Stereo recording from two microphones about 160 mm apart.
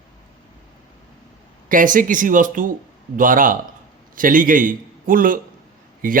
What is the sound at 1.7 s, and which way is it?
A man's voice, 55° right (ahead or behind).